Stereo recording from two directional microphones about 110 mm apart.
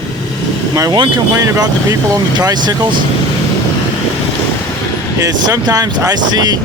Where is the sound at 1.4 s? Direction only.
30° right (ahead or behind).